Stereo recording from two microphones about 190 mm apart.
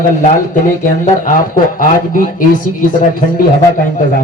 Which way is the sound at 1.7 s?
45° left (ahead or behind).